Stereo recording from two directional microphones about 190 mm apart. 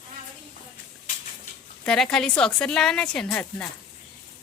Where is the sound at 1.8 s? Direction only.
5° left (ahead or behind).